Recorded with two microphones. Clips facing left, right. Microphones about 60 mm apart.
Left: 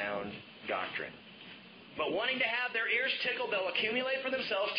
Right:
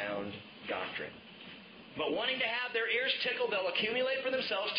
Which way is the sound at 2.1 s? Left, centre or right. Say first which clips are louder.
Left 3 dB; left.